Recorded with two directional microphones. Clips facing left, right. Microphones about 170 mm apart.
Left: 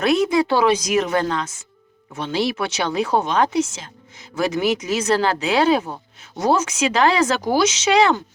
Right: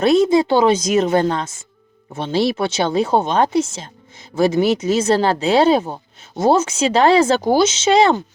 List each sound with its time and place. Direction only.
0.0 s speech: 30° right (ahead or behind)